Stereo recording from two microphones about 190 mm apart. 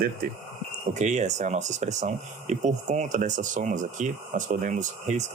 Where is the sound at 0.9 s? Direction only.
40° right (ahead or behind).